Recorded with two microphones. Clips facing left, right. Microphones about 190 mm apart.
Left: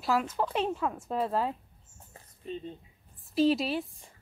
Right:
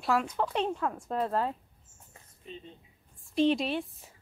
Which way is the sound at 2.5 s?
40° left (ahead or behind).